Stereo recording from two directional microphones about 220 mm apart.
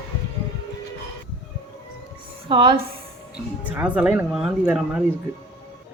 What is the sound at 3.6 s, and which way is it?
Speech, 5° right (ahead or behind).